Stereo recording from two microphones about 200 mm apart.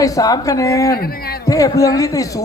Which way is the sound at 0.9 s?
50° left (ahead or behind).